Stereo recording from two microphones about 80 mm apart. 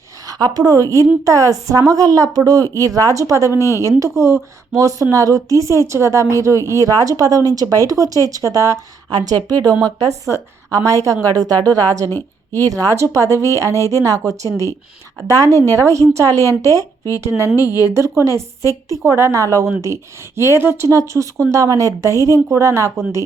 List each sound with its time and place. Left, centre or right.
0.3 s a woman's voice: right
9.0 s a woman's voice: right
9.8 s a woman's voice: right
17.5 s a woman's voice: left
17.8 s a woman's voice: right